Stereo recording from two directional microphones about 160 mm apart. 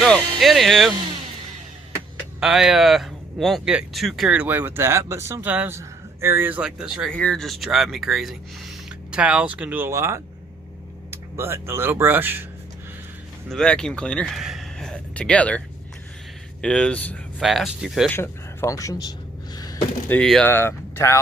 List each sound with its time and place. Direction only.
0.0 s speech: centre (ahead or behind)
2.4 s speech: 5° right (ahead or behind)
13.5 s speech: 5° left (ahead or behind)
18.1 s speech: 15° left (ahead or behind)
19.5 s a sound: 25° left (ahead or behind)
20.1 s speech: 5° left (ahead or behind)